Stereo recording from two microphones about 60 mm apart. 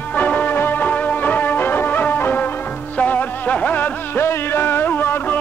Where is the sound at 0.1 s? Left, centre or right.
Left.